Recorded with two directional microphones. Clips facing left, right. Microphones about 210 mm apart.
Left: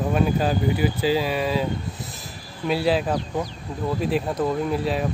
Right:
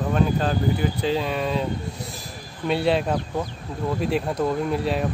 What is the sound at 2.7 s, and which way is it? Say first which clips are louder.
Speech: even; centre (ahead or behind).